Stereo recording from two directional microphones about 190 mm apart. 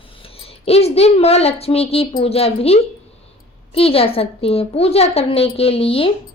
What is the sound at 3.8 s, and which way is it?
Speech, 30° left (ahead or behind).